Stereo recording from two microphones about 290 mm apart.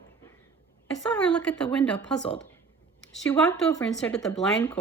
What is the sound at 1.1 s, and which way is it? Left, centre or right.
Speech, centre.